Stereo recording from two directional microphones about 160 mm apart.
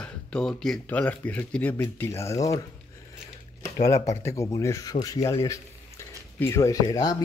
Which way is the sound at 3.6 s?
20° left (ahead or behind).